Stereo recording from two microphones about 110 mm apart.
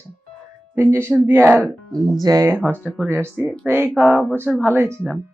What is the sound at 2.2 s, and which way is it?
Speech, 30° right (ahead or behind).